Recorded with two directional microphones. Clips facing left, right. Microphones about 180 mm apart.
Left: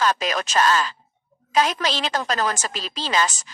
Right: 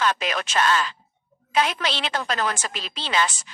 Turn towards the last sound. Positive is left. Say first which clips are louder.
# left 2 dB
turn(degrees=40)  # may be behind; listen again after turning